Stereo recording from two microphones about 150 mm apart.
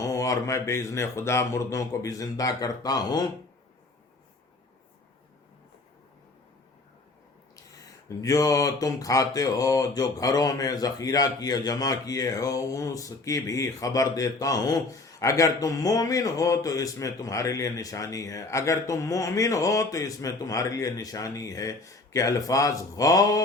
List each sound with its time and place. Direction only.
0.0 s speech: 20° left (ahead or behind)
7.5 s speech: 20° left (ahead or behind)